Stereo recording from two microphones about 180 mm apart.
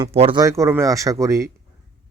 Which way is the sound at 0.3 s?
15° right (ahead or behind).